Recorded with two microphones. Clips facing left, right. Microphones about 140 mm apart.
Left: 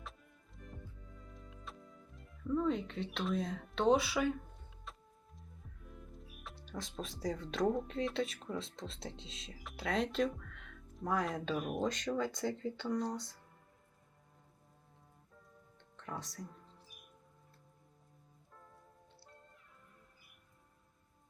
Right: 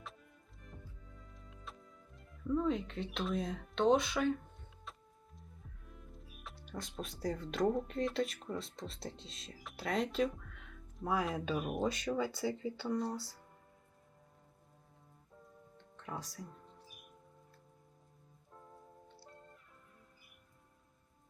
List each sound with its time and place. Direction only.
1.3 s music: centre (ahead or behind)
5.9 s speech: centre (ahead or behind)
16.0 s speech: centre (ahead or behind)
18.5 s music: 20° right (ahead or behind)